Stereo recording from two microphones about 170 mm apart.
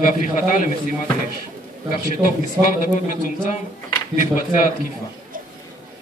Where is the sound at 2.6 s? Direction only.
15° right (ahead or behind).